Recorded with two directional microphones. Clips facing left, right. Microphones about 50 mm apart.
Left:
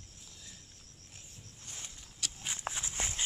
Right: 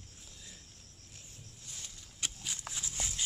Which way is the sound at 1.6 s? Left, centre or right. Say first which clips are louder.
Left 2 dB; left.